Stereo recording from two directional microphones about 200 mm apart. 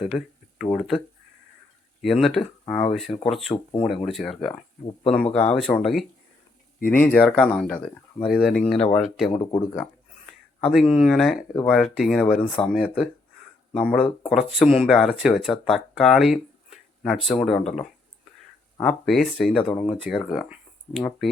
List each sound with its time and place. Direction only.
0.6 s speech: centre (ahead or behind)
3.5 s speech: 20° left (ahead or behind)
3.8 s speech: centre (ahead or behind)
6.7 s speech: 45° left (ahead or behind)
7.0 s speech: 5° left (ahead or behind)
9.3 s speech: 20° left (ahead or behind)
10.6 s speech: centre (ahead or behind)
18.8 s speech: 5° left (ahead or behind)
20.5 s a sound: centre (ahead or behind)